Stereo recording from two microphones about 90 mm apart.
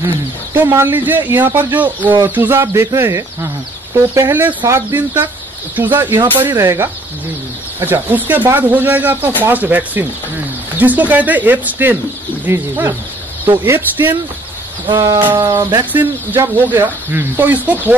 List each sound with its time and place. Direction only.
0.5 s speech: 25° right (ahead or behind)
6.6 s speech: 35° right (ahead or behind)
7.8 s speech: 20° right (ahead or behind)
15.0 s speech: 50° right (ahead or behind)
15.9 s speech: 25° right (ahead or behind)